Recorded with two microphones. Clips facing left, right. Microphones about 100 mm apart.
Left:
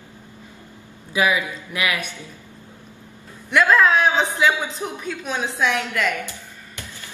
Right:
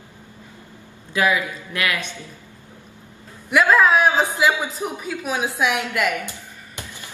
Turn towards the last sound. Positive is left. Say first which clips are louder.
# right 1 dB
turn(degrees=-20)  # may be behind; listen again after turning